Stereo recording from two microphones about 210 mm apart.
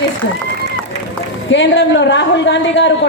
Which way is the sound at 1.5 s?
60° left (ahead or behind).